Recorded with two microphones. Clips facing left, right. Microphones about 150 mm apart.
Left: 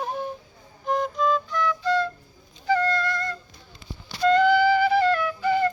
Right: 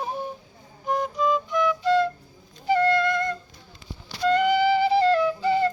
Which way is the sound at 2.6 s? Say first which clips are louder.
Right 2 dB; 25° right (ahead or behind).